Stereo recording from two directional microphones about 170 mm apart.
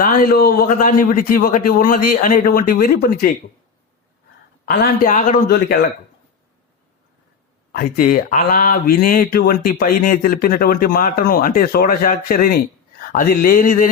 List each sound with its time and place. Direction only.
0.0 s speech: 55° left (ahead or behind)
4.6 s speech: 60° left (ahead or behind)
7.7 s speech: 60° left (ahead or behind)